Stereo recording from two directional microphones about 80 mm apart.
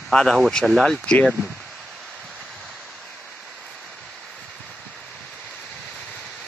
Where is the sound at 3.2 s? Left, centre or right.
Centre.